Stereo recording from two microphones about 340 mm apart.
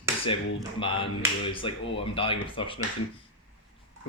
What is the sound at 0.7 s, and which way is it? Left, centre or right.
Speech, centre.